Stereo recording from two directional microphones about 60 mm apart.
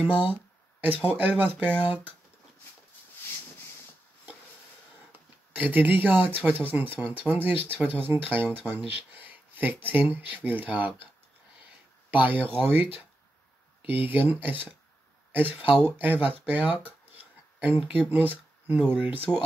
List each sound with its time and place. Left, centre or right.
0.0 s speech: right
5.5 s speech: right
12.2 s speech: right
18.1 s speech: right